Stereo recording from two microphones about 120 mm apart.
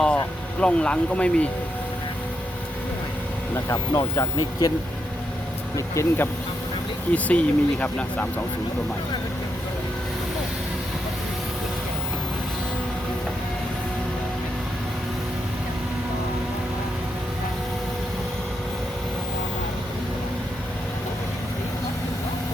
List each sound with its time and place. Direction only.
0.6 s speech: 10° left (ahead or behind)
3.9 s speech: 35° left (ahead or behind)
5.7 s speech: 25° left (ahead or behind)
7.1 s speech: 10° left (ahead or behind)